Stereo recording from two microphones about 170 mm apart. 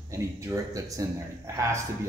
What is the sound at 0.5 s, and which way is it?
Speech, 20° right (ahead or behind).